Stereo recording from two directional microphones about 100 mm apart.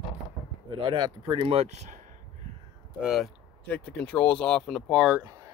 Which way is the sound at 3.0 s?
Centre (ahead or behind).